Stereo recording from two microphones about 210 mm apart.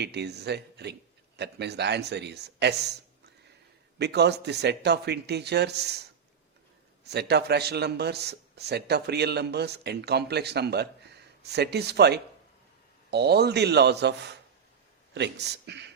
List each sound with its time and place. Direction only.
0.0 s a man's voice: 50° right (ahead or behind)
3.9 s a man's voice: 50° right (ahead or behind)
7.0 s a man's voice: 50° right (ahead or behind)